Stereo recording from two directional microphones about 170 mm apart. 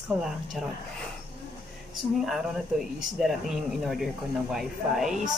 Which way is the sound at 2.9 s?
Centre (ahead or behind).